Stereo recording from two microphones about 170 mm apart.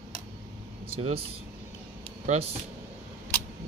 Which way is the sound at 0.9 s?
35° right (ahead or behind).